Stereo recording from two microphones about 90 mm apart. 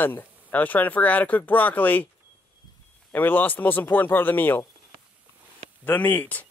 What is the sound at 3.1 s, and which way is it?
Speech, 20° left (ahead or behind).